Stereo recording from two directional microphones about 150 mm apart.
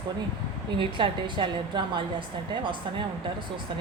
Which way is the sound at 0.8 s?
30° right (ahead or behind).